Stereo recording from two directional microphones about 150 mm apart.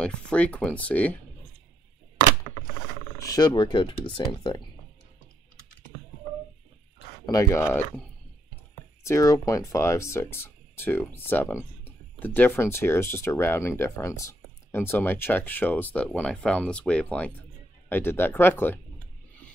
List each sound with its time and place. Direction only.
0.0 s speech: 5° left (ahead or behind)
3.2 s speech: 25° left (ahead or behind)
7.2 s speech: 20° left (ahead or behind)
9.0 s speech: 20° left (ahead or behind)